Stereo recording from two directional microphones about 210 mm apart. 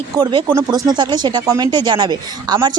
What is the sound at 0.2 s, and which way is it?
Speech, 20° right (ahead or behind).